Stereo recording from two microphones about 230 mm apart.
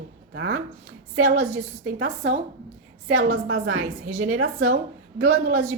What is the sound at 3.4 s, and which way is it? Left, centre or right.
Speech, right.